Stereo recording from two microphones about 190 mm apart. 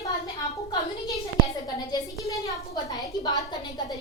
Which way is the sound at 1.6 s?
20° left (ahead or behind).